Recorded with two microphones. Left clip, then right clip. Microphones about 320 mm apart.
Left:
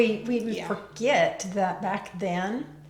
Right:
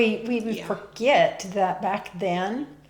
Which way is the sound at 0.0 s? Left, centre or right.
Right.